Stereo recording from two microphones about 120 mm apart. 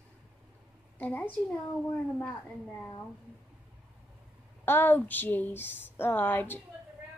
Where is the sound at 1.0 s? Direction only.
15° left (ahead or behind).